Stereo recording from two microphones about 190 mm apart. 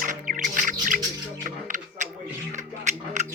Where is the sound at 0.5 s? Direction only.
45° right (ahead or behind).